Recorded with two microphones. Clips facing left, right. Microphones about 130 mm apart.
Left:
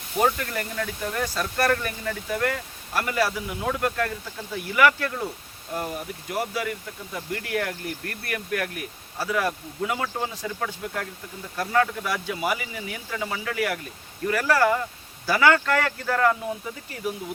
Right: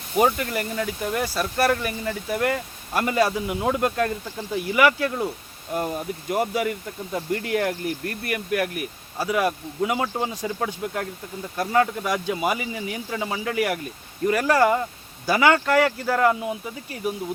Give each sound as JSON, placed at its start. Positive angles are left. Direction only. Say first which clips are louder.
{"t": 0.2, "sound": "speech", "louder": "right 3 dB", "side_deg": -15}